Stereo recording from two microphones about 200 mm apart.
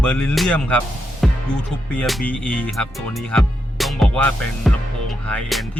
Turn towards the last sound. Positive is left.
turn(degrees=0)  # may be behind; listen again after turning